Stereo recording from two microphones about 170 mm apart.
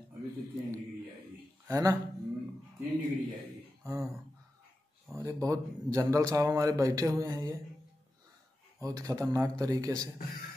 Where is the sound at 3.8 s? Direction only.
15° right (ahead or behind).